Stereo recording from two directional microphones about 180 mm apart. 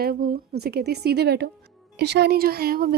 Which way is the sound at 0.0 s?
55° right (ahead or behind).